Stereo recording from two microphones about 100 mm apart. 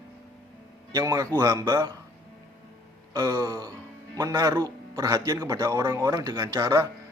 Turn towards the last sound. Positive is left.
turn(degrees=-30)  # may be behind; listen again after turning